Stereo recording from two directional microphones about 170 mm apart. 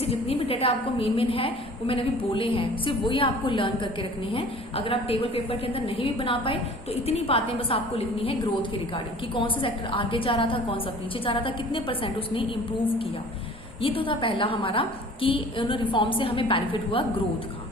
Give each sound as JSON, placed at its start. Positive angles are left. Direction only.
{"t": 0.0, "sound": "a woman's voice", "side_deg": 35}
{"t": 13.8, "sound": "a woman's voice", "side_deg": 30}